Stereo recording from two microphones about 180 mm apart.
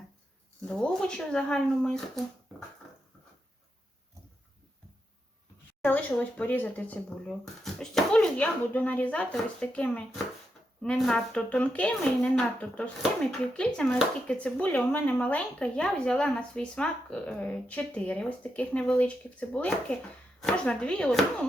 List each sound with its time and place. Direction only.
0.7 s speech: 5° left (ahead or behind)
5.8 s speech: 10° left (ahead or behind)